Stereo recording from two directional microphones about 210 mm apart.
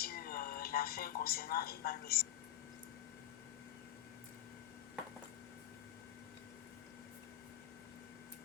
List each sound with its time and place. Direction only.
0.0 s speech: 45° left (ahead or behind)